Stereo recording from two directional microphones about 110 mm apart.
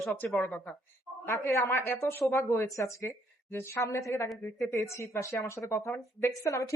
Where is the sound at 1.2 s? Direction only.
30° left (ahead or behind).